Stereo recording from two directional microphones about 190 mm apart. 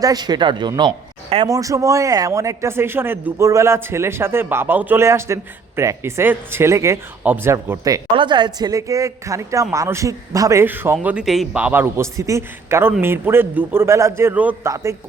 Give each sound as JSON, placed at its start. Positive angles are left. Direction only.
{"t": 0.0, "sound": "speech", "side_deg": -20}